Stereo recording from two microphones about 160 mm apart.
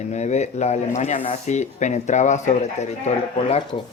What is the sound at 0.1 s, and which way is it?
Speech, 45° left (ahead or behind).